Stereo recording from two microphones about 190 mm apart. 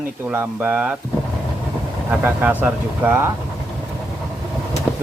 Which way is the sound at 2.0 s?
10° right (ahead or behind).